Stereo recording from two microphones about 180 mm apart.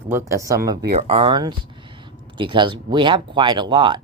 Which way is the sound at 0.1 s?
15° right (ahead or behind).